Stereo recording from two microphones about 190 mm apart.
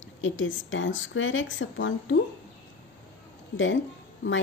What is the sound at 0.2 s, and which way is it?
A woman's voice, 90° left.